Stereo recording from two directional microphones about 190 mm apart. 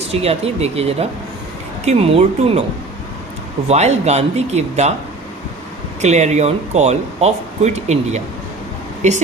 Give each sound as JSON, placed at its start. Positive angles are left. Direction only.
{"t": 0.1, "sound": "speech", "side_deg": -30}
{"t": 3.7, "sound": "speech", "side_deg": -35}
{"t": 6.0, "sound": "speech", "side_deg": -35}